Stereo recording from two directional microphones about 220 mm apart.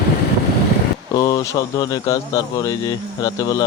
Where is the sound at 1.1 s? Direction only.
20° left (ahead or behind).